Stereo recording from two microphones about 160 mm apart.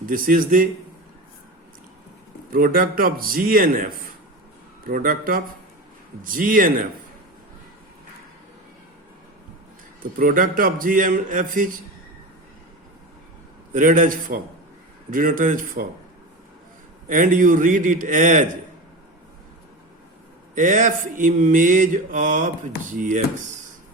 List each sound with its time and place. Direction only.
0.0 s a man's voice: 60° right (ahead or behind)
2.5 s a man's voice: 60° right (ahead or behind)
10.0 s a man's voice: 60° right (ahead or behind)
13.7 s a man's voice: 55° right (ahead or behind)
17.1 s a man's voice: 55° right (ahead or behind)
20.6 s mantra: 55° right (ahead or behind)